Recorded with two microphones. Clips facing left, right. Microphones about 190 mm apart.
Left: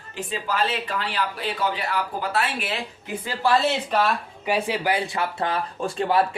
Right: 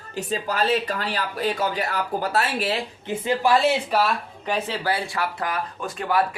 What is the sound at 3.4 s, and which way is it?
Speech, 10° right (ahead or behind).